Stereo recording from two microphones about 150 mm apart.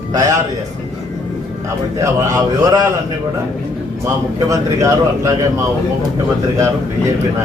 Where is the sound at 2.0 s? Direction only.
25° right (ahead or behind).